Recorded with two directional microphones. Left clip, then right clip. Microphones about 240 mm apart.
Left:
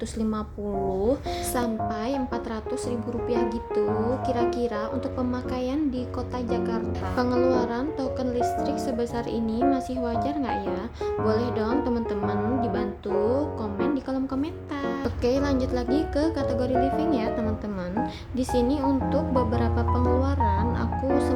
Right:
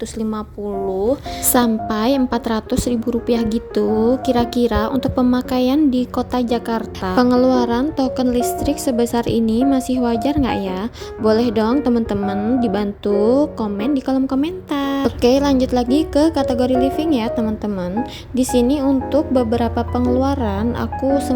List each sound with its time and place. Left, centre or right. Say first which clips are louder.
1.5 s a woman's voice: right 12 dB; right